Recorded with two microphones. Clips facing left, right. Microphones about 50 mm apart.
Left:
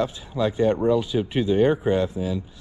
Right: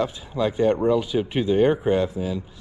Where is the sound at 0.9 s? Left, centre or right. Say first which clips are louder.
Even; right.